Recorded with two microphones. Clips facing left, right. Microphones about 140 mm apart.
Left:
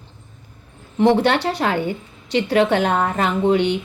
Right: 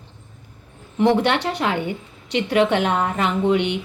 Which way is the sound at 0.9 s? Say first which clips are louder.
Left 2 dB; 30° left (ahead or behind).